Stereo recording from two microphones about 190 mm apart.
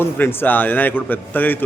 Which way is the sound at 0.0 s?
10° left (ahead or behind).